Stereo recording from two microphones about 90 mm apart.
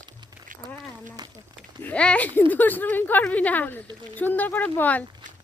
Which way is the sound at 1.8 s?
15° left (ahead or behind).